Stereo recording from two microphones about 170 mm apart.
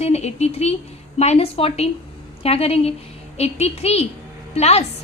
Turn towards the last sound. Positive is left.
turn(degrees=40)  # may be behind; listen again after turning